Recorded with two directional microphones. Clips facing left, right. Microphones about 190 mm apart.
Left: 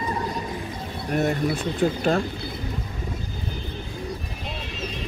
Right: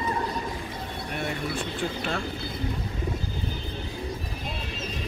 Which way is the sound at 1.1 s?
40° left (ahead or behind).